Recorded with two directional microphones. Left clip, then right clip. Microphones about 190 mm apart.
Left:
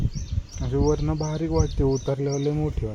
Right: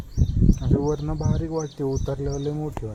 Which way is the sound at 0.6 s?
40° left (ahead or behind).